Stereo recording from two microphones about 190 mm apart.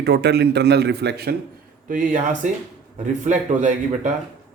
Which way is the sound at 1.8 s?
45° right (ahead or behind).